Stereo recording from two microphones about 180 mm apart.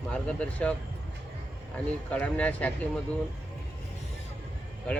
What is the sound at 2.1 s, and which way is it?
Speech, 5° left (ahead or behind).